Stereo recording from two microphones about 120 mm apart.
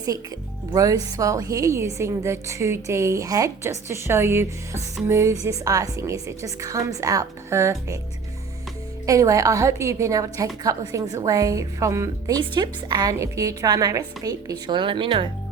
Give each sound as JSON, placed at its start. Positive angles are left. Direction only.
{"t": 0.7, "sound": "a woman's voice", "side_deg": -30}
{"t": 9.0, "sound": "a woman's voice", "side_deg": -30}
{"t": 12.4, "sound": "a woman's voice", "side_deg": -35}